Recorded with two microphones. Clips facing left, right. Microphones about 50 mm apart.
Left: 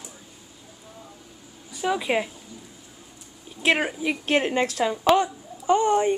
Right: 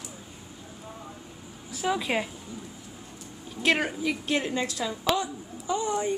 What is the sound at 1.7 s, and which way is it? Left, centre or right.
Speech, centre.